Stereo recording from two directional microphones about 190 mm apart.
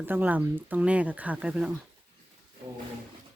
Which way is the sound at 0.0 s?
10° right (ahead or behind).